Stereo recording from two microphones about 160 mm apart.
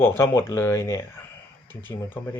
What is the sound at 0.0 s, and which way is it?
Speech, 15° left (ahead or behind).